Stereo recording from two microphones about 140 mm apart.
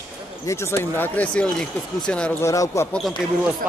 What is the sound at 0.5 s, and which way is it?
Speech, 20° left (ahead or behind).